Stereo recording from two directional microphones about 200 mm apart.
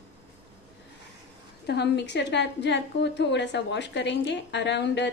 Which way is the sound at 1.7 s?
60° left (ahead or behind).